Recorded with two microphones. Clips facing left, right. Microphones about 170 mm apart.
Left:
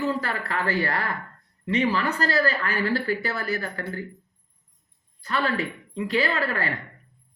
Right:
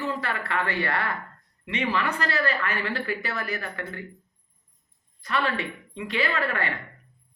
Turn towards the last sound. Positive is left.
turn(degrees=35)  # may be behind; listen again after turning